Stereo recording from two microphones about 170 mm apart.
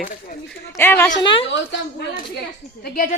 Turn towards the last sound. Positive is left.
turn(degrees=55)  # may be behind; listen again after turning